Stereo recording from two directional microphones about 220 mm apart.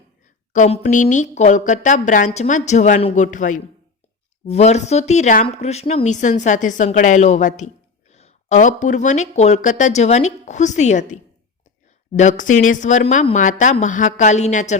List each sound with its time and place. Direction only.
0.5 s speech: 35° left (ahead or behind)